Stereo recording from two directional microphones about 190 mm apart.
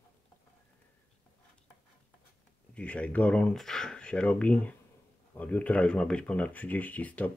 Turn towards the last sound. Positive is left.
turn(degrees=10)  # may be behind; listen again after turning